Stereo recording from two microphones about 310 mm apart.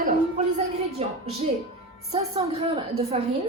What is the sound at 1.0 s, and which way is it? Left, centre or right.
A woman's voice, centre.